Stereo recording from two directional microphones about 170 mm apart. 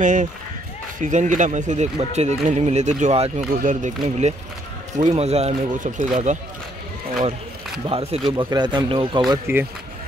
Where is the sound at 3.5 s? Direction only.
50° right (ahead or behind).